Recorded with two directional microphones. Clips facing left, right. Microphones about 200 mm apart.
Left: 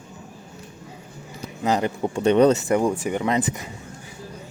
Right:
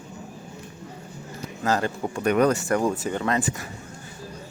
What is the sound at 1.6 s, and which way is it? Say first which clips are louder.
Speech: left 2 dB; 20° left (ahead or behind).